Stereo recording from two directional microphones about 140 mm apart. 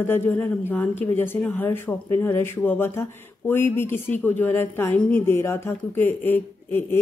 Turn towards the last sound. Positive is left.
turn(degrees=15)  # may be behind; listen again after turning